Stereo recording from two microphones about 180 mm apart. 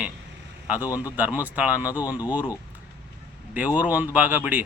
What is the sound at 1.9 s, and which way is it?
Speech, 20° left (ahead or behind).